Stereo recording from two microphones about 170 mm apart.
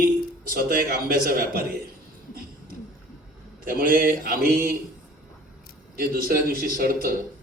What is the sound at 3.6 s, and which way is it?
A man's voice, 60° right (ahead or behind).